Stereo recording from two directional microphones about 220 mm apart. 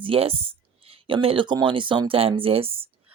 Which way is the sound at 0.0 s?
25° right (ahead or behind).